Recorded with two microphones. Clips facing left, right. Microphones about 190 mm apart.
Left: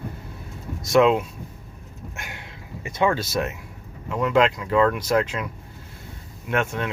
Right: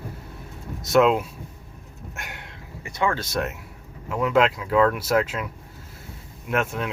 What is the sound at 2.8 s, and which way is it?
Speech, 20° left (ahead or behind).